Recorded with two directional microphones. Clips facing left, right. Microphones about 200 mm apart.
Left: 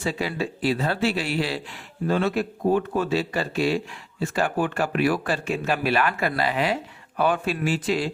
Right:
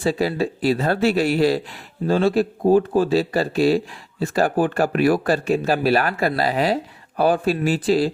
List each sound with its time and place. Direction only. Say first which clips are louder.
0.0 s speech: right 6 dB; 35° right (ahead or behind)